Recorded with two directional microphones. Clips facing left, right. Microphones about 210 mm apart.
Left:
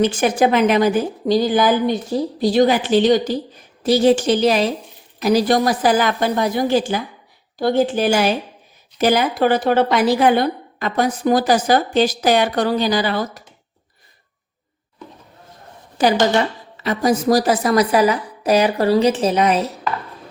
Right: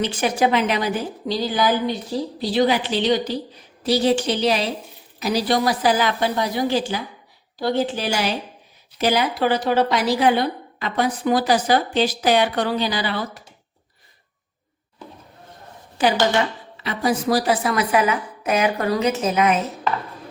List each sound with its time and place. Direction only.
0.0 s a woman's voice: 45° left (ahead or behind)
16.0 s a woman's voice: 40° left (ahead or behind)